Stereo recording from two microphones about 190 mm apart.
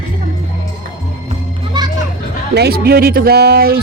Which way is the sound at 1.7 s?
20° right (ahead or behind).